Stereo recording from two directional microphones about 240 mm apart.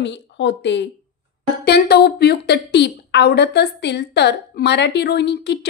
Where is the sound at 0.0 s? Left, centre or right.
Left.